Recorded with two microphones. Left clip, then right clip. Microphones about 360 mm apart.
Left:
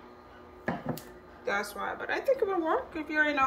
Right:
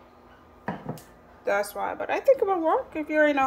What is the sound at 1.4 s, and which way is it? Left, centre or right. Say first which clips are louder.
Speech: right 6 dB; right.